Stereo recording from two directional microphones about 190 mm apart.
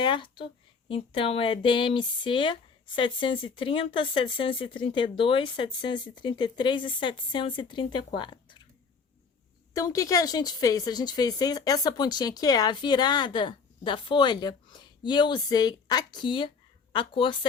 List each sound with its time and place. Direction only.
0.0 s speech: 25° left (ahead or behind)
9.7 s speech: 20° left (ahead or behind)